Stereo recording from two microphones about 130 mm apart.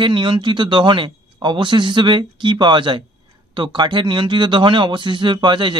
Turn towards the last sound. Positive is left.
turn(degrees=-35)  # may be behind; listen again after turning